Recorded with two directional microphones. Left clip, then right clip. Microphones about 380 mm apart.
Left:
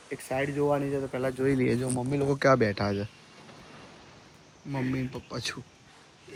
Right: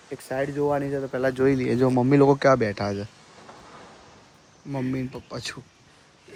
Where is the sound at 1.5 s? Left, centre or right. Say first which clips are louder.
Right 6 dB; centre.